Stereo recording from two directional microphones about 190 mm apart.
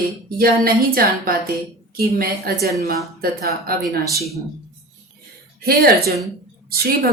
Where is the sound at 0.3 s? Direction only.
50° right (ahead or behind).